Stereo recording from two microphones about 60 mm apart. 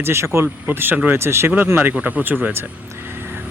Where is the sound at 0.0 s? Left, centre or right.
Right.